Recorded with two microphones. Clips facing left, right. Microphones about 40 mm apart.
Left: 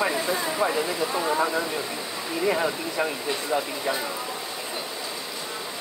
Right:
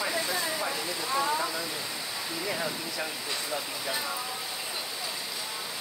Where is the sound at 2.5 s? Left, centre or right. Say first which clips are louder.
Left 10 dB; left.